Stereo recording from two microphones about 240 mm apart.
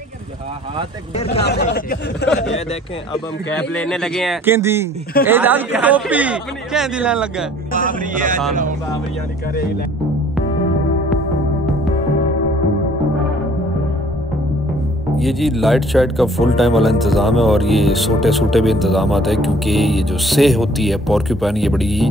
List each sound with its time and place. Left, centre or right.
1.1 s speech: left
1.4 s speech: left
3.1 s speech: centre
4.6 s speech: centre
8.0 s speech: right
15.1 s speech: centre